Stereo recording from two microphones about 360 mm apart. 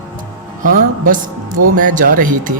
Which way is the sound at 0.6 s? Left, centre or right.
Right.